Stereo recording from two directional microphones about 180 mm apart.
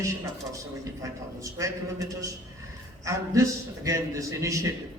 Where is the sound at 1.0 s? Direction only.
15° right (ahead or behind).